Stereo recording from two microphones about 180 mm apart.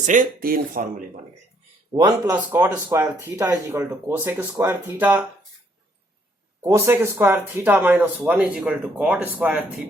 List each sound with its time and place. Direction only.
0.0 s speech: 45° right (ahead or behind)
1.9 s speech: 25° right (ahead or behind)
2.6 s speech: 10° right (ahead or behind)
6.6 s speech: 15° right (ahead or behind)